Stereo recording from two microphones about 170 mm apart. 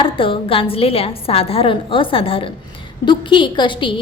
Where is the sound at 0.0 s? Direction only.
30° left (ahead or behind).